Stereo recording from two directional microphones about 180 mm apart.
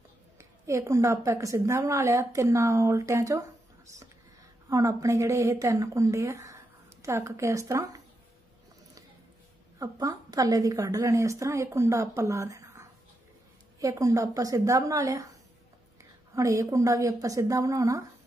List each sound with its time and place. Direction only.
0.4 s a woman's voice: 15° right (ahead or behind)
4.6 s a woman's voice: 20° right (ahead or behind)
9.8 s a woman's voice: 20° right (ahead or behind)
16.3 s a woman's voice: 20° right (ahead or behind)